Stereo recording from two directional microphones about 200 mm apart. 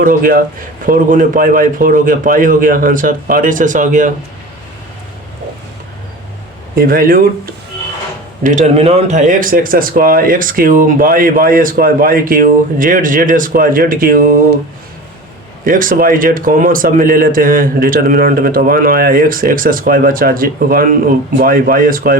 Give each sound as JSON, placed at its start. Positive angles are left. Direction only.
{"t": 0.0, "sound": "speech", "side_deg": -45}
{"t": 6.7, "sound": "speech", "side_deg": -45}
{"t": 8.4, "sound": "speech", "side_deg": -35}
{"t": 15.6, "sound": "speech", "side_deg": -45}